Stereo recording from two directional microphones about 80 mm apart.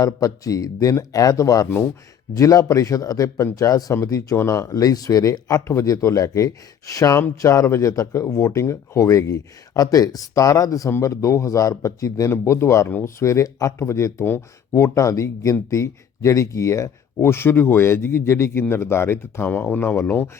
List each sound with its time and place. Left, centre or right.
0.0 s speech: left